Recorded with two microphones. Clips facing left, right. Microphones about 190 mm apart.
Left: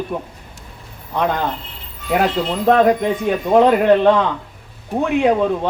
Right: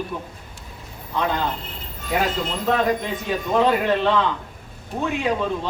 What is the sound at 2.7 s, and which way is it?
Speech, 55° left (ahead or behind).